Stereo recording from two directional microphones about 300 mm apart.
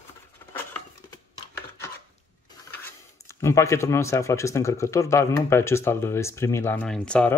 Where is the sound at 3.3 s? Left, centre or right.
Centre.